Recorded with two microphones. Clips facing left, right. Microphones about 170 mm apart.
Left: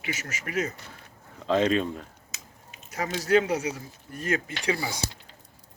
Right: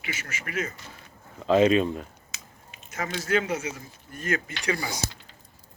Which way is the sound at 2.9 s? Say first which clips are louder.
Left 4 dB; 35° left (ahead or behind).